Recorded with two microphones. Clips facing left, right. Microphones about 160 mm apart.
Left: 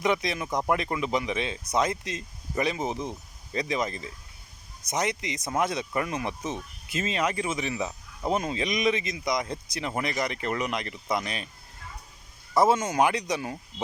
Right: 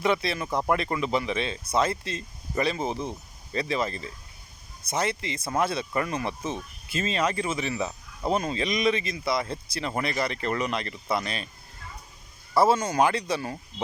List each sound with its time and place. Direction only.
0.0 s speech: 15° left (ahead or behind)
12.5 s speech: 20° left (ahead or behind)